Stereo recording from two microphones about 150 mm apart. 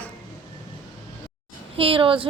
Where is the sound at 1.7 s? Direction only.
35° right (ahead or behind).